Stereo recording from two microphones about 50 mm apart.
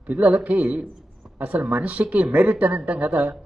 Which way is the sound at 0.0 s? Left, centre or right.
Right.